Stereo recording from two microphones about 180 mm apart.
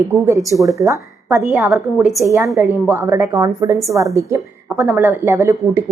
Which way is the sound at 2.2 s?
15° right (ahead or behind).